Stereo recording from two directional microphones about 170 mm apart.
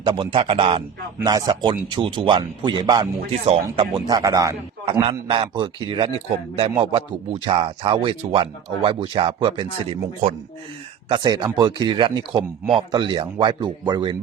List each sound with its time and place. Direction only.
0.0 s a man's voice: 30° right (ahead or behind)
7.3 s speech: 35° right (ahead or behind)
11.1 s a man's voice: 25° right (ahead or behind)